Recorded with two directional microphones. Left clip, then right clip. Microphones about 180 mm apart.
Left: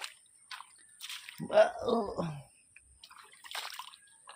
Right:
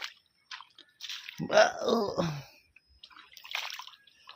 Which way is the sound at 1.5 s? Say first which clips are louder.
Right 2 dB; 60° right (ahead or behind).